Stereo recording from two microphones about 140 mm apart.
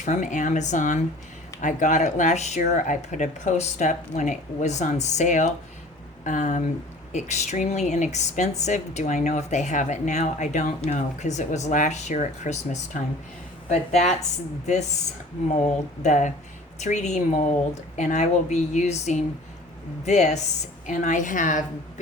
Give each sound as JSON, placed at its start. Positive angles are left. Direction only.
{"t": 0.0, "sound": "speech", "side_deg": 60}
{"t": 15.6, "sound": "speech", "side_deg": 60}
{"t": 20.8, "sound": "speech", "side_deg": 65}